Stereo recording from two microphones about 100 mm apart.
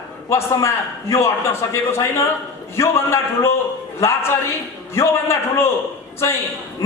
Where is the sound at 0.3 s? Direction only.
25° left (ahead or behind).